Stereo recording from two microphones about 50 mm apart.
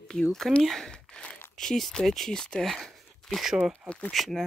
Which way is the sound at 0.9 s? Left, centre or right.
Centre.